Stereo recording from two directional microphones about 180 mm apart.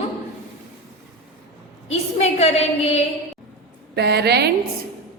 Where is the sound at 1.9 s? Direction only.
35° left (ahead or behind).